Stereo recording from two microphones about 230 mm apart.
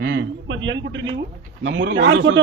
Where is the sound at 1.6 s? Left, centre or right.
Right.